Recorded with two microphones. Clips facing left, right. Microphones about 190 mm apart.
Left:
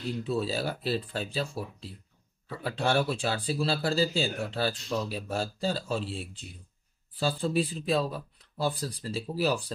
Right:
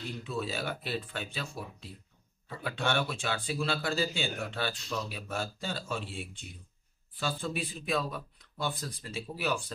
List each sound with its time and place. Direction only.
0.2 s speech: 35° left (ahead or behind)